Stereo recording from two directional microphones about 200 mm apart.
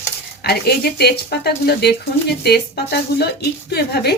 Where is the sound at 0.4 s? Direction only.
55° left (ahead or behind).